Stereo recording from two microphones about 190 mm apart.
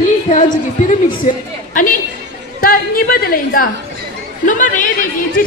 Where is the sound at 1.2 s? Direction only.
45° left (ahead or behind).